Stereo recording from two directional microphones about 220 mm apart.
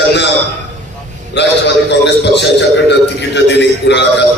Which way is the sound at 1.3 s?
50° left (ahead or behind).